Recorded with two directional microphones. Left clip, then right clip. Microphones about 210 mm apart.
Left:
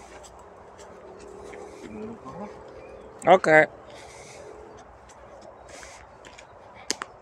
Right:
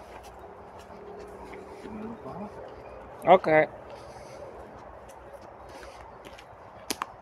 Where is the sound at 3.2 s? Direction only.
30° left (ahead or behind).